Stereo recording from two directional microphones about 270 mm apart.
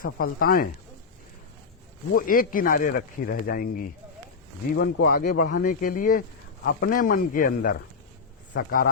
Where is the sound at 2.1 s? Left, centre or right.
Left.